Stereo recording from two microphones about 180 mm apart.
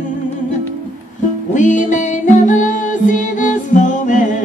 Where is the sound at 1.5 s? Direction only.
45° left (ahead or behind).